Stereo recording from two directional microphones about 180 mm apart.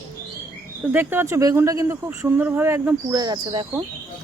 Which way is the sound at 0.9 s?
10° right (ahead or behind).